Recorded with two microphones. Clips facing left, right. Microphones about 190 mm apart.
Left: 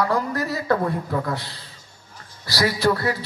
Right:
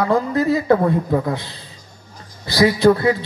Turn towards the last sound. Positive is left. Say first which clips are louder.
# right 7 dB
turn(degrees=-20)  # may be behind; listen again after turning